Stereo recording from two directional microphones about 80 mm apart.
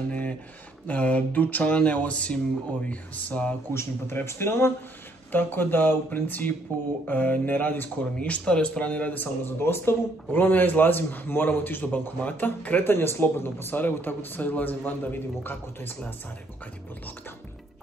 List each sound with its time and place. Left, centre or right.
0.8 s speech: centre
3.7 s speech: left